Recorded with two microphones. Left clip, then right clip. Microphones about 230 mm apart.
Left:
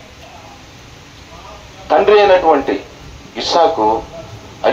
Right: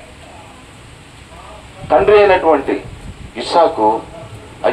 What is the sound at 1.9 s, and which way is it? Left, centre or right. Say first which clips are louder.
A man's voice: even; left.